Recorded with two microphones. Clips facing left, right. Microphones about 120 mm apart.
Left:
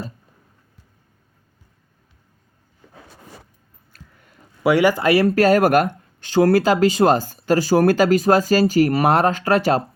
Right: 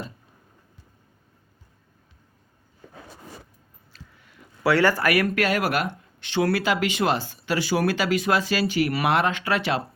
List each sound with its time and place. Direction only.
3.9 s a sound: 45° left (ahead or behind)
4.6 s speech: 15° left (ahead or behind)
5.0 s speech: 30° left (ahead or behind)